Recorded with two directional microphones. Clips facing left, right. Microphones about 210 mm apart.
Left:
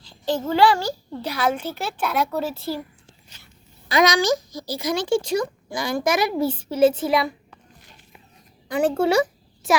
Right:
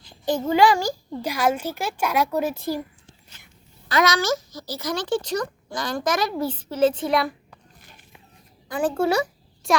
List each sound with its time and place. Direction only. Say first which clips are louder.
0.0 s a child's voice: even; 15° right (ahead or behind)
3.8 s a child's voice: left 3 dB; 15° left (ahead or behind)
8.7 s a woman's voice: left 3 dB; 25° left (ahead or behind)
9.6 s a child's voice: left 1 dB; centre (ahead or behind)